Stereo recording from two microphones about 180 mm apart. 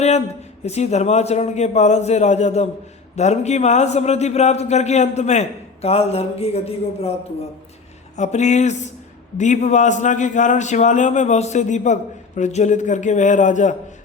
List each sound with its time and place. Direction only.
0.6 s a man's voice: 35° left (ahead or behind)
8.1 s a man's voice: 40° left (ahead or behind)